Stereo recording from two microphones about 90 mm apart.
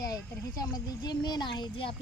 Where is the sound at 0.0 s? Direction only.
45° left (ahead or behind).